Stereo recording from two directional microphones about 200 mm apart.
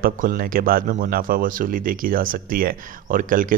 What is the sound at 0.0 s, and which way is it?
Speech, 45° right (ahead or behind).